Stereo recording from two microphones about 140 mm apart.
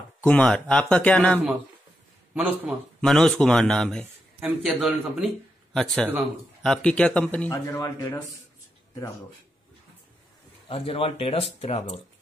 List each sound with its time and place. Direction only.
0.2 s speech: 10° left (ahead or behind)
2.3 s a man's voice: 10° right (ahead or behind)
3.0 s a man's voice: 5° left (ahead or behind)
7.5 s a man's voice: 20° left (ahead or behind)
10.7 s speech: 40° left (ahead or behind)